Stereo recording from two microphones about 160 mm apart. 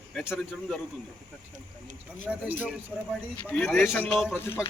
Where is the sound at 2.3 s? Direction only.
10° right (ahead or behind).